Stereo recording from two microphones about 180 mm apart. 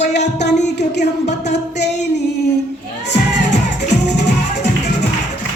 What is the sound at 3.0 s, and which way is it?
Music, 70° left (ahead or behind).